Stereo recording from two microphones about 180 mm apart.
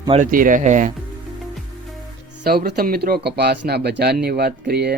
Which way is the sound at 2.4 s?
60° right (ahead or behind).